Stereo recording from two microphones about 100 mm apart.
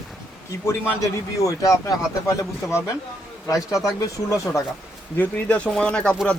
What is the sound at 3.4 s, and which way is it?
Speech, 35° left (ahead or behind).